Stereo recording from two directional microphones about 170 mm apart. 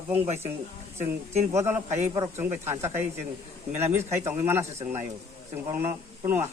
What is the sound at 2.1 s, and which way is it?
Speech, 15° right (ahead or behind).